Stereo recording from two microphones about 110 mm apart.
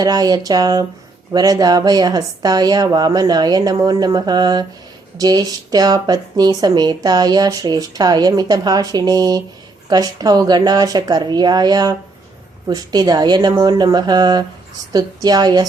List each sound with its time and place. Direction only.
0.0 s speech: 35° right (ahead or behind)